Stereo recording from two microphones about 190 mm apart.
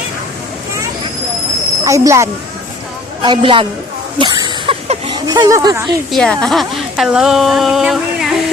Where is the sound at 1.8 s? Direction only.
15° right (ahead or behind).